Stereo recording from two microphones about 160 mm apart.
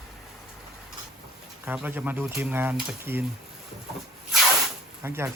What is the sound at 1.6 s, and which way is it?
Speech, 10° right (ahead or behind).